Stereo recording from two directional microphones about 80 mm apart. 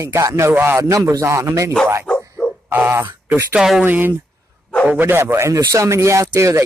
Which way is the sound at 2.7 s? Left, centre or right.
Right.